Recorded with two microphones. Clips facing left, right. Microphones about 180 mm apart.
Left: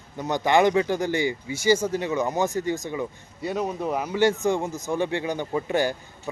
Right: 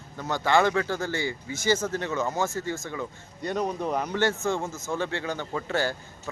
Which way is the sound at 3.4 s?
5° left (ahead or behind).